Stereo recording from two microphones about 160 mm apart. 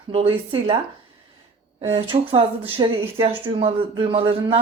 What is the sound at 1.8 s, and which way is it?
A man's voice, 40° right (ahead or behind).